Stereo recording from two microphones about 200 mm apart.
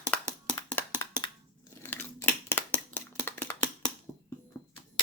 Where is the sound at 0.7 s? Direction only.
15° left (ahead or behind).